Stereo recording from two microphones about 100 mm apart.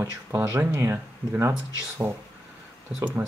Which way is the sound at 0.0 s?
30° right (ahead or behind).